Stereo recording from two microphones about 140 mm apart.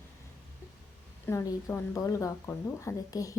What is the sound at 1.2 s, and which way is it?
A woman's voice, 20° left (ahead or behind).